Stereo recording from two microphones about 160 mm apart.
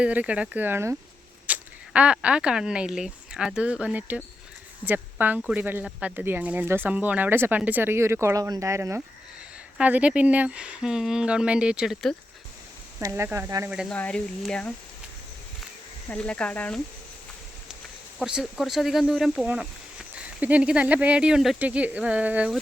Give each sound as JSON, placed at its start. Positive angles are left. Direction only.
{"t": 0.0, "sound": "speech", "side_deg": -10}
{"t": 13.0, "sound": "speech", "side_deg": -15}
{"t": 13.9, "sound": "speech", "side_deg": 5}
{"t": 16.0, "sound": "speech", "side_deg": 5}
{"t": 18.2, "sound": "speech", "side_deg": -5}